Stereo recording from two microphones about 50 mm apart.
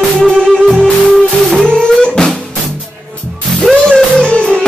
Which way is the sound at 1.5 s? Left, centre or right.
Centre.